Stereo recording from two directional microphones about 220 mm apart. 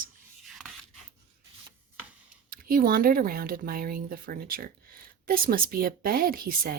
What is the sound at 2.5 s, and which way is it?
Speech, 40° right (ahead or behind).